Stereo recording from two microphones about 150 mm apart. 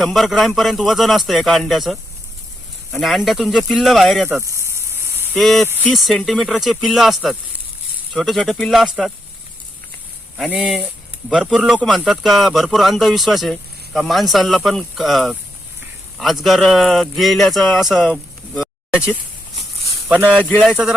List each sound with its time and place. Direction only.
0.0 s speech: centre (ahead or behind)
4.3 s snake: 20° right (ahead or behind)
5.3 s speech: centre (ahead or behind)
10.3 s speech: 5° right (ahead or behind)
20.1 s speech: 10° right (ahead or behind)
20.4 s speech: 10° left (ahead or behind)
20.7 s speech: 5° right (ahead or behind)